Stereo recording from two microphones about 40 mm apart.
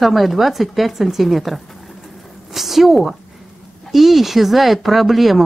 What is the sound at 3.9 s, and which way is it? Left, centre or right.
Speech, centre.